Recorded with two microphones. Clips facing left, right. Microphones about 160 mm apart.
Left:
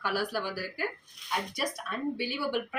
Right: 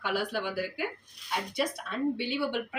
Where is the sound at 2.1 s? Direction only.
25° right (ahead or behind).